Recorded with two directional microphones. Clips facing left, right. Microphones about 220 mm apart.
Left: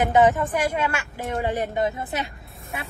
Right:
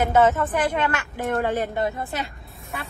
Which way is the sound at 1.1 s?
50° right (ahead or behind).